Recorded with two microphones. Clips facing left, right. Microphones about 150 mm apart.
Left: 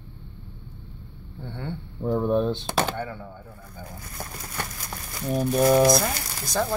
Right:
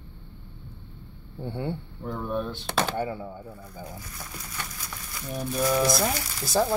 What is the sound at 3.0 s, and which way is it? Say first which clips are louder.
Speech: right 3 dB; 15° right (ahead or behind).